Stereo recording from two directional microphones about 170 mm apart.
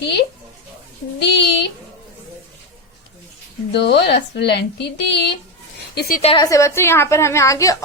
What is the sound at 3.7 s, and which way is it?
Speech, 80° left.